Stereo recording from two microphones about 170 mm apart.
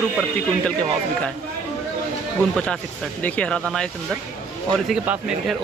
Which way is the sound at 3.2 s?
5° left (ahead or behind).